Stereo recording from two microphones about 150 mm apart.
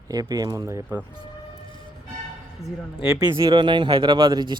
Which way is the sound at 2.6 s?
45° right (ahead or behind).